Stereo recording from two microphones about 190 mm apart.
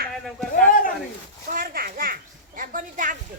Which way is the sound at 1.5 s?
50° right (ahead or behind).